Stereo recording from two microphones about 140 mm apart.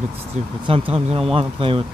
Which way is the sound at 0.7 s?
45° right (ahead or behind).